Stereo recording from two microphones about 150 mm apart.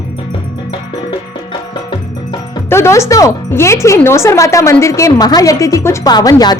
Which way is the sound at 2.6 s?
15° left (ahead or behind).